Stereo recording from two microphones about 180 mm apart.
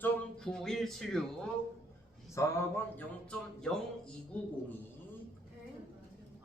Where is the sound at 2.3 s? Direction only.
15° left (ahead or behind).